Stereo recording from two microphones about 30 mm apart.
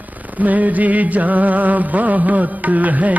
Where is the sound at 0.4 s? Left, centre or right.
Right.